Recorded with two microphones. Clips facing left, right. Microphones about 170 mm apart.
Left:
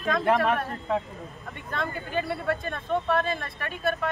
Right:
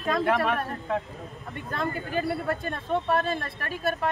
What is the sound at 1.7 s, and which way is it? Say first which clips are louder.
Speech: right 2 dB; 40° right (ahead or behind).